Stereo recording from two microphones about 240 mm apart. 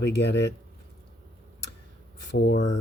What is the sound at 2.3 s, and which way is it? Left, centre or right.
Speech, left.